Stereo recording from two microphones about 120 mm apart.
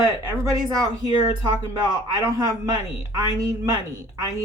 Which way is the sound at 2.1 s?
25° right (ahead or behind).